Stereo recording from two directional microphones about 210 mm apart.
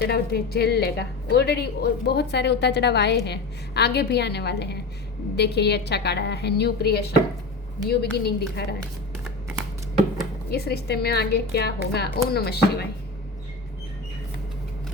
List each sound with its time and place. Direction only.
0.0 s a woman's voice: 50° left (ahead or behind)
10.5 s a woman's voice: 50° left (ahead or behind)